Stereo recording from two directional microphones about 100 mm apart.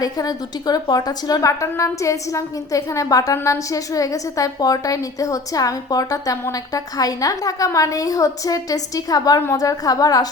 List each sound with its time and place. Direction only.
0.0 s a woman's voice: 40° left (ahead or behind)